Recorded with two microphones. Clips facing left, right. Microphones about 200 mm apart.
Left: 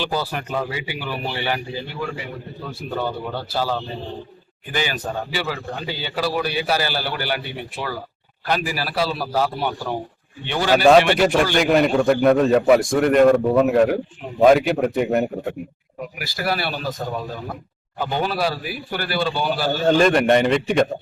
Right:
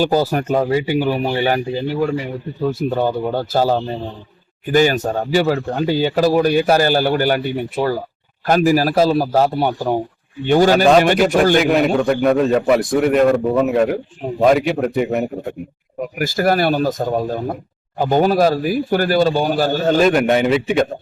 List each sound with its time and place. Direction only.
0.0 s speech: 45° right (ahead or behind)
11.5 s a man's voice: centre (ahead or behind)
16.0 s speech: 45° right (ahead or behind)
19.8 s a man's voice: centre (ahead or behind)